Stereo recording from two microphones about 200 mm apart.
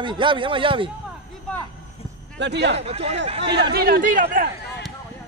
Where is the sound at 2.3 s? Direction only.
60° right (ahead or behind).